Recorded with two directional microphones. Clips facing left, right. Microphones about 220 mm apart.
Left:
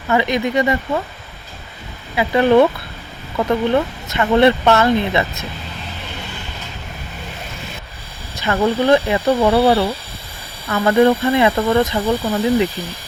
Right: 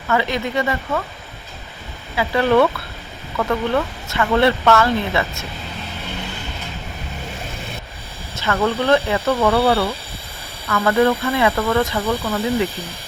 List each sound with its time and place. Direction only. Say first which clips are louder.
0.1 s speech: left 3 dB; 15° left (ahead or behind)
2.1 s speech: left 3 dB; 20° left (ahead or behind)
8.4 s speech: left 3 dB; 15° left (ahead or behind)